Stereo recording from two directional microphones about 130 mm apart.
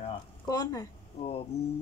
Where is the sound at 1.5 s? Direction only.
55° left (ahead or behind).